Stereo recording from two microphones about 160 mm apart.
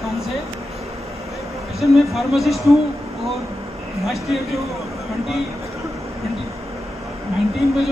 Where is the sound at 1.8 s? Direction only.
Centre (ahead or behind).